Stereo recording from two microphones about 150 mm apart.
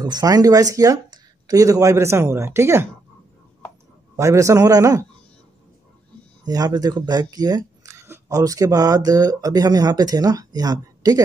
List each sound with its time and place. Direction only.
0.0 s speech: 25° right (ahead or behind)
4.2 s speech: 20° right (ahead or behind)
6.4 s speech: 25° right (ahead or behind)